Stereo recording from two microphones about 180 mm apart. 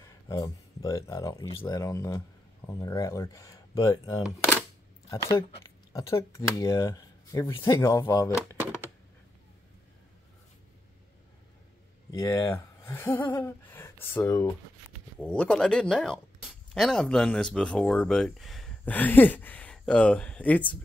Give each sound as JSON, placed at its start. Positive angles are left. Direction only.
{"t": 0.0, "sound": "speech", "side_deg": 20}
{"t": 5.9, "sound": "speech", "side_deg": 15}
{"t": 12.1, "sound": "speech", "side_deg": 15}